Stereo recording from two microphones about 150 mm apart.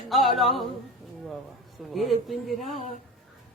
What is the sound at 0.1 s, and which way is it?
Speech, centre (ahead or behind).